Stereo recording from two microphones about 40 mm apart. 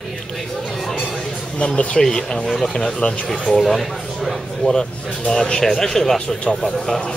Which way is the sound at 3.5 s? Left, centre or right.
Centre.